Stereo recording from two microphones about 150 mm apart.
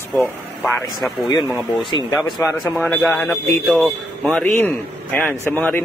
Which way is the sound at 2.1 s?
20° left (ahead or behind).